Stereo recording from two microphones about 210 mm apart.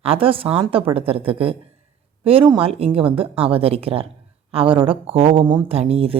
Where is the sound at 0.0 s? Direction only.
25° right (ahead or behind).